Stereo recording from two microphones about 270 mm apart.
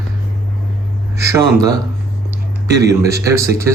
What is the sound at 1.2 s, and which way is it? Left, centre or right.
A man's voice, centre.